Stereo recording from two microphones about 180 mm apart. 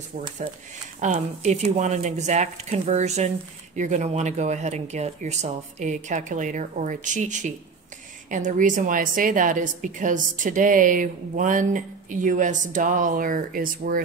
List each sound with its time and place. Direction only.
1.0 s a woman's voice: 40° right (ahead or behind)